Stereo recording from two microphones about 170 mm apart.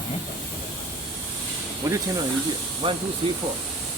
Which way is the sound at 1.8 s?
20° right (ahead or behind).